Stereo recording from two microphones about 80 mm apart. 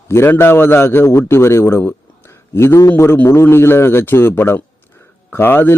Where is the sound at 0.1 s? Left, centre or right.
Left.